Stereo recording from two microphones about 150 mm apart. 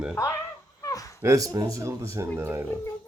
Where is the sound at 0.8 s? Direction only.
20° left (ahead or behind).